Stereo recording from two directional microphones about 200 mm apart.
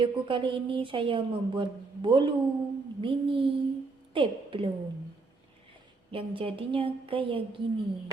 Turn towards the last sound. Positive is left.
turn(degrees=-25)  # may be behind; listen again after turning